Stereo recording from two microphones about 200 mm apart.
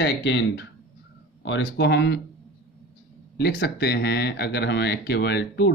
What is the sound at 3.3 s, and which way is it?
Speech, 55° left (ahead or behind).